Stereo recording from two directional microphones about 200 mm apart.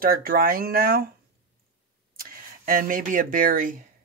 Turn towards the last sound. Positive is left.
turn(degrees=-45)  # may be behind; listen again after turning